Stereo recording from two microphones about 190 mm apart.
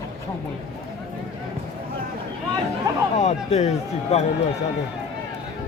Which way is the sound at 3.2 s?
35° left (ahead or behind).